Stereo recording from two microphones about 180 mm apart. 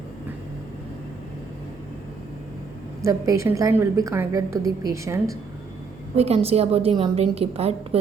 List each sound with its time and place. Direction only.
3.0 s a woman's voice: 15° right (ahead or behind)
6.1 s a woman's voice: 35° right (ahead or behind)